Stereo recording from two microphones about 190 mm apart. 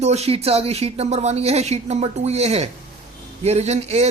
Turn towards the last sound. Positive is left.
turn(degrees=-35)  # may be behind; listen again after turning